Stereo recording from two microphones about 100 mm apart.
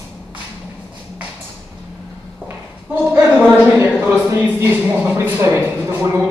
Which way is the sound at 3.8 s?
25° right (ahead or behind).